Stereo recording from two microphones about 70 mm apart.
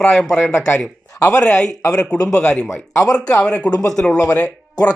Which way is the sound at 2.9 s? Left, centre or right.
Left.